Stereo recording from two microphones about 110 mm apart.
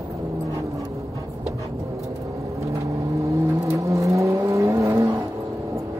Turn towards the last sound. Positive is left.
turn(degrees=-25)  # may be behind; listen again after turning